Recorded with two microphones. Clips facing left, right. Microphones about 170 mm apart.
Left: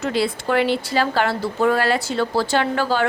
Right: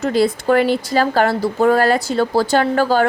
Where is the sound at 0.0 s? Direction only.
45° right (ahead or behind).